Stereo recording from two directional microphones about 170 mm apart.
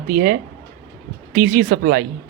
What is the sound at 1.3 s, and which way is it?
Speech, 55° right (ahead or behind).